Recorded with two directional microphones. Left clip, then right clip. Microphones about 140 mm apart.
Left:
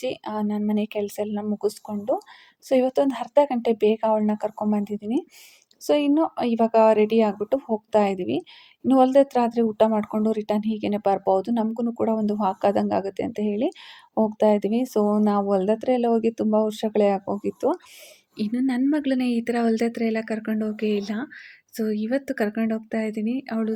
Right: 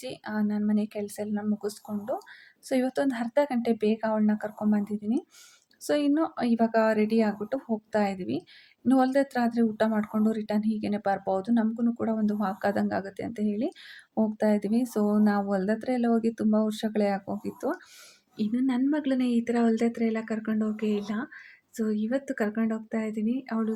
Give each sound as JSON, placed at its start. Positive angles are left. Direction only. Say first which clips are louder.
{"t": 0.0, "sound": "speech", "louder": "left 6 dB", "side_deg": 25}
{"t": 18.3, "sound": "a woman's voice", "louder": "left 3 dB", "side_deg": 30}